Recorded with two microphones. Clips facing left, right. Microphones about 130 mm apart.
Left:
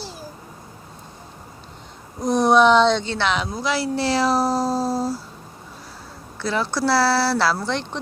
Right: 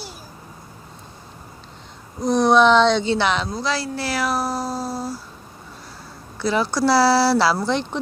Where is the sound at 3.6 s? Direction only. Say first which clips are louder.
Left 3 dB; 20° left (ahead or behind); by 5.1 s 35° left (ahead or behind).